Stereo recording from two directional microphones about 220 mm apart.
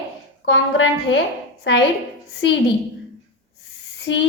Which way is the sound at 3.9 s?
55° left (ahead or behind).